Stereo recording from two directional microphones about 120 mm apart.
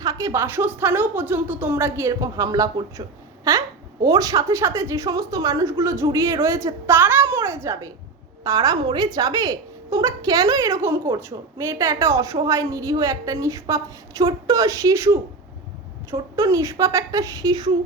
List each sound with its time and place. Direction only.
0.0 s a woman's voice: 30° right (ahead or behind)
4.0 s a woman's voice: 30° right (ahead or behind)
16.3 s a woman's voice: 25° right (ahead or behind)